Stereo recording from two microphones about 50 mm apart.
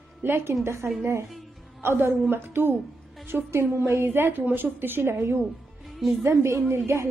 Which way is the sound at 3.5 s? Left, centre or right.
Right.